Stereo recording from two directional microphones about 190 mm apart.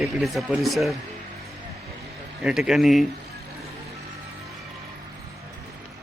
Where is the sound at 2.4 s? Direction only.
5° right (ahead or behind).